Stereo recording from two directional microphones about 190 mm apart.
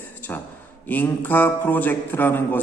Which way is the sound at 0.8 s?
10° left (ahead or behind).